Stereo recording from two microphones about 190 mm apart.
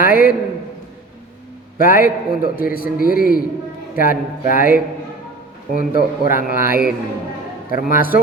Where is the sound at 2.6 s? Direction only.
50° left (ahead or behind).